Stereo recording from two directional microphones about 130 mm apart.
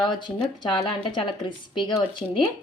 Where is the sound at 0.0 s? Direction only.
35° left (ahead or behind).